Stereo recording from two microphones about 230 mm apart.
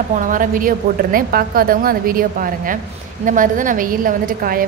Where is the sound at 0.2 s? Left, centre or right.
Right.